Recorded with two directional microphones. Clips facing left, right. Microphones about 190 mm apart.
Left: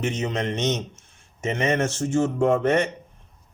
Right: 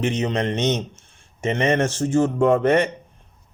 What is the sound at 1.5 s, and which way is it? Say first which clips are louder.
Speech: right 3 dB; 55° right (ahead or behind).